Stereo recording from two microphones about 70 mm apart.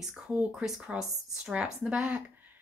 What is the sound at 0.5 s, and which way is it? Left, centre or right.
Speech, centre.